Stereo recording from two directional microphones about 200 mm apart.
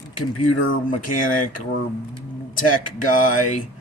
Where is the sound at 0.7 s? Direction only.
40° left (ahead or behind).